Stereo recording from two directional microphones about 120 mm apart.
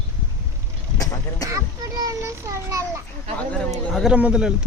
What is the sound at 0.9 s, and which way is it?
Vehicle, 30° left (ahead or behind).